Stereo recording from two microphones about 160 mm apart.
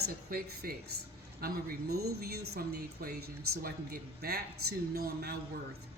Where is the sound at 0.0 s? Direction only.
75° right (ahead or behind).